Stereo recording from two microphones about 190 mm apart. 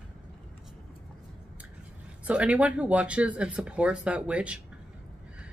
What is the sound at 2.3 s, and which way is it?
Speech, 5° right (ahead or behind).